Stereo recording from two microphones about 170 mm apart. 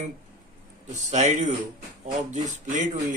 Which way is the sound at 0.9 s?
45° right (ahead or behind).